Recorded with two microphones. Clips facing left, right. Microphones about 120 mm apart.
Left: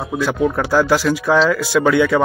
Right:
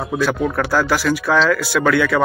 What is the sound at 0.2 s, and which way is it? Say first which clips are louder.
Speech: left 2 dB; 15° left (ahead or behind).